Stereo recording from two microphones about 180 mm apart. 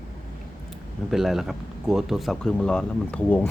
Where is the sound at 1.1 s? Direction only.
Centre (ahead or behind).